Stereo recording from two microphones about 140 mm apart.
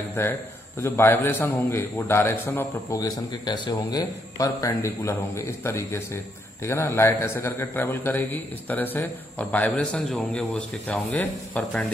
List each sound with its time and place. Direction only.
0.1 s a man's voice: 15° left (ahead or behind)